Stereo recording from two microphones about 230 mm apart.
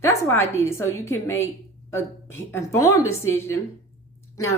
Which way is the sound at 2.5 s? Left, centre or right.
Centre.